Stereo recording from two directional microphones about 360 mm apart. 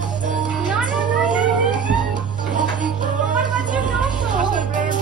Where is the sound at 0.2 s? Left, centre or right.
Right.